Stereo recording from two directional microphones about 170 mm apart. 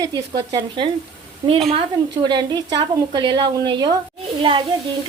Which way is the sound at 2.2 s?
25° right (ahead or behind).